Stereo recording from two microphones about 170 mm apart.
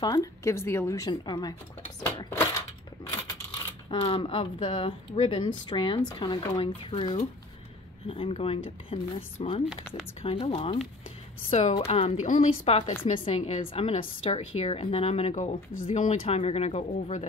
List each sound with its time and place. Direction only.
0.0 s speech: 20° left (ahead or behind)
3.9 s a woman's voice: 30° left (ahead or behind)